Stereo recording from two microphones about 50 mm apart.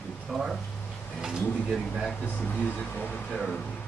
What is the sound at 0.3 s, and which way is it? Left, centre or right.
Speech, centre.